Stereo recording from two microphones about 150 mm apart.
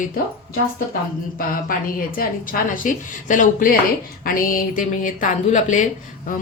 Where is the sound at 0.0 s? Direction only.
75° left (ahead or behind).